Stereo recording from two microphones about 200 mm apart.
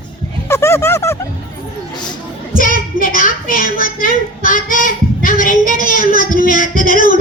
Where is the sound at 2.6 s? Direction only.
45° left (ahead or behind).